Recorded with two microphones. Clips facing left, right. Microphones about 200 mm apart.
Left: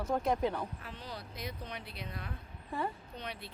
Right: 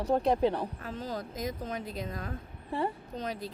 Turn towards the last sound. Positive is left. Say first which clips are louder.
# right 8 dB
turn(degrees=-40)  # may be behind; listen again after turning